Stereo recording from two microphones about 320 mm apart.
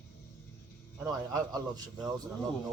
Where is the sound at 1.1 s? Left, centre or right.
Centre.